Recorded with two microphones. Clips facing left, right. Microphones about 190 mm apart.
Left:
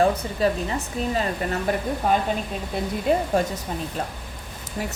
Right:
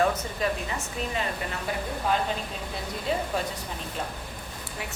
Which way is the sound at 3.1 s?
50° left (ahead or behind).